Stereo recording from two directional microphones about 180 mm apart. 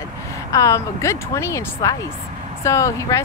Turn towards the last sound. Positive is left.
turn(degrees=15)  # may be behind; listen again after turning